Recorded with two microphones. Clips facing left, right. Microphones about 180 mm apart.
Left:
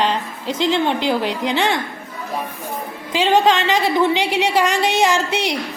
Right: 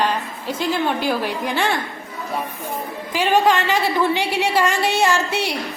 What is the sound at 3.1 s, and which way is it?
A woman's voice, 20° left (ahead or behind).